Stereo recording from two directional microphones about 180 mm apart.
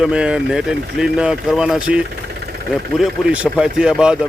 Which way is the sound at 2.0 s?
60° right (ahead or behind).